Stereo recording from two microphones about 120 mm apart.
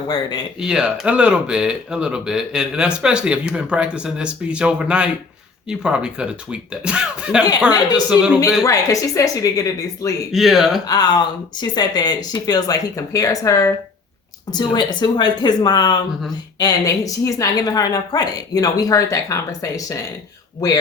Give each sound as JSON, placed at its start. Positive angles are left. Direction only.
{"t": 0.6, "sound": "speech", "side_deg": -5}
{"t": 8.6, "sound": "a woman's voice", "side_deg": 25}
{"t": 10.3, "sound": "speech", "side_deg": 0}
{"t": 10.8, "sound": "speech", "side_deg": 35}
{"t": 14.5, "sound": "a woman's voice", "side_deg": 35}